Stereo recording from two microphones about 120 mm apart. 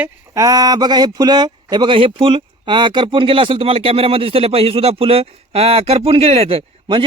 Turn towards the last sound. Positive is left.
turn(degrees=-50)  # may be behind; listen again after turning